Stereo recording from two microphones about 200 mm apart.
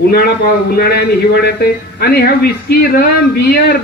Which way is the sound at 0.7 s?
50° left (ahead or behind).